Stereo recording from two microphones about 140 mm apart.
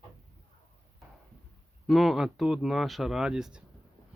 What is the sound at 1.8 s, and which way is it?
Speech, centre (ahead or behind).